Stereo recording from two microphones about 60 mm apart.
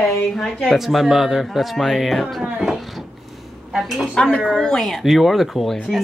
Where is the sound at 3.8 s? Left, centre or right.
Centre.